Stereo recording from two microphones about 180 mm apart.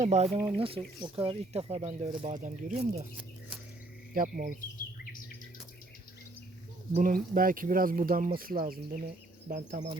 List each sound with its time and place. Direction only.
0.0 s speech: 40° right (ahead or behind)
4.1 s speech: 50° right (ahead or behind)
6.9 s speech: 50° right (ahead or behind)